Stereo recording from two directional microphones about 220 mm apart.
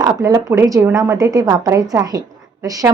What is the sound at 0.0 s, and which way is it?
A woman's voice, 15° right (ahead or behind).